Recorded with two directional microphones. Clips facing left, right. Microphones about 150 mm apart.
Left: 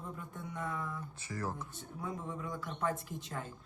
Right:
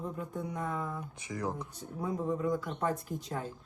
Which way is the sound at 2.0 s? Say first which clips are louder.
Right 9 dB; 40° right (ahead or behind).